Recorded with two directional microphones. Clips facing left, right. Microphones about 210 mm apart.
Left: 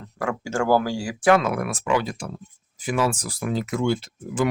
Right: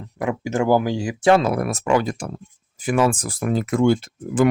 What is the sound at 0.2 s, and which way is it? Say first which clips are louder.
Speech: right 3 dB; 20° right (ahead or behind).